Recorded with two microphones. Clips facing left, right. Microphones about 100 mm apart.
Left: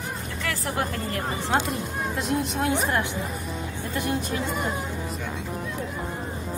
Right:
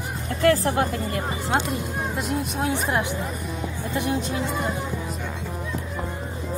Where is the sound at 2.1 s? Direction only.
15° right (ahead or behind).